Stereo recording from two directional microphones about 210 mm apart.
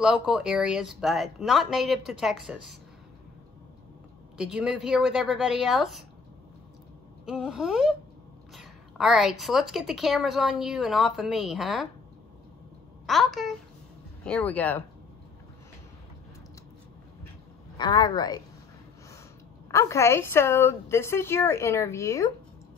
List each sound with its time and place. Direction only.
0.0 s a woman's voice: 5° right (ahead or behind)
4.4 s a woman's voice: 5° right (ahead or behind)
7.2 s a woman's voice: 5° right (ahead or behind)
13.0 s a child's voice: centre (ahead or behind)
17.7 s speech: 20° left (ahead or behind)
19.7 s a woman's voice: 15° left (ahead or behind)